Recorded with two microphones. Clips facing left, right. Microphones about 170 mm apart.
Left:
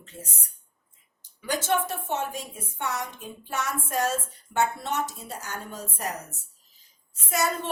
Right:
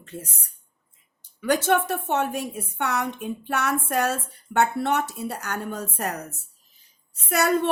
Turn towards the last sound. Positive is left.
turn(degrees=-65)  # may be behind; listen again after turning